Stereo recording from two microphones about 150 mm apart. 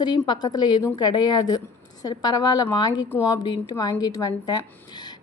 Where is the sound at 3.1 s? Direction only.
20° left (ahead or behind).